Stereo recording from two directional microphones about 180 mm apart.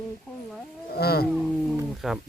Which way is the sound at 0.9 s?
60° left (ahead or behind).